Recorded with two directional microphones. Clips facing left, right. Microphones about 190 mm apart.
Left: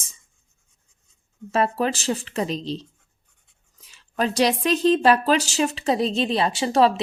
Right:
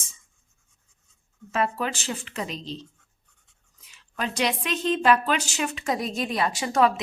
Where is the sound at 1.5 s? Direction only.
35° left (ahead or behind).